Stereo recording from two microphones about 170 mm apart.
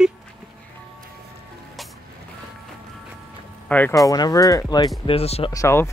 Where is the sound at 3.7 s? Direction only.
10° left (ahead or behind).